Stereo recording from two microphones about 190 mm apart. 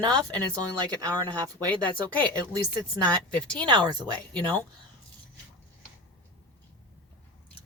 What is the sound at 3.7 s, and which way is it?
Speech, 20° right (ahead or behind).